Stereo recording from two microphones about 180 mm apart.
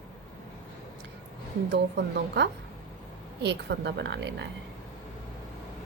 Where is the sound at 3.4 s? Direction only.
70° right (ahead or behind).